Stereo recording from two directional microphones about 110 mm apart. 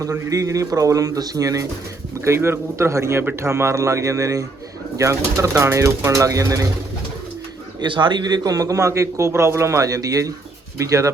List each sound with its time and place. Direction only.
0.0 s a man's voice: 30° right (ahead or behind)
7.8 s a man's voice: 45° right (ahead or behind); by 11.1 s 30° right (ahead or behind)